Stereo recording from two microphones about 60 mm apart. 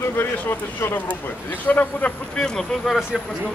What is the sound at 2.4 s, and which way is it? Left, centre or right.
Speech, centre.